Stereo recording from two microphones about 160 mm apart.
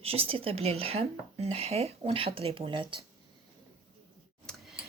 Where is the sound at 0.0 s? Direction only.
35° right (ahead or behind).